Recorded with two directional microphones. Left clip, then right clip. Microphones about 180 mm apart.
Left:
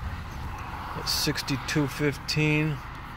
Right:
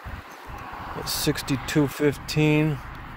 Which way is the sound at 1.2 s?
40° right (ahead or behind).